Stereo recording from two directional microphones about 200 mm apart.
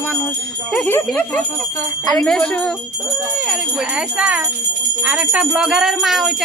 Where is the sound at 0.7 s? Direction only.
5° left (ahead or behind).